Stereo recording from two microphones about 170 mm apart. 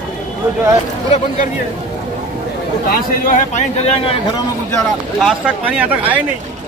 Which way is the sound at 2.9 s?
55° left (ahead or behind).